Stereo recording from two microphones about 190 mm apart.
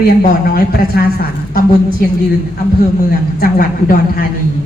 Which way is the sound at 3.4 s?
50° left (ahead or behind).